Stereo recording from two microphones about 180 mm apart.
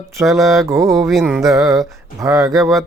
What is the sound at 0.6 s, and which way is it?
Speech, 20° right (ahead or behind).